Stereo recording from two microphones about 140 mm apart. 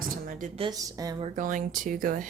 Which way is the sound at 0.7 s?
25° right (ahead or behind).